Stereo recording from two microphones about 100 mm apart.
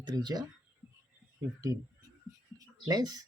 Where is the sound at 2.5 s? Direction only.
40° right (ahead or behind).